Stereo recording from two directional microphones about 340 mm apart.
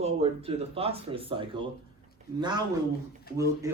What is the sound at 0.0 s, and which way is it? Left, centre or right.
Speech, centre.